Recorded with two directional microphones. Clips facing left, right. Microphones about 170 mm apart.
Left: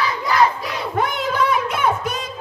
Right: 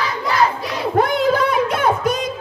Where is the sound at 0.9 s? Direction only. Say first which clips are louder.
Right 6 dB; 35° right (ahead or behind).